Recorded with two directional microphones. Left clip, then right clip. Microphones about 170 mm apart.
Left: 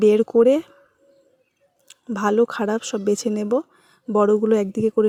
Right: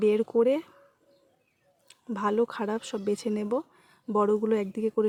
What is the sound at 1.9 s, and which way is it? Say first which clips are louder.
Speech: left 7 dB; 30° left (ahead or behind).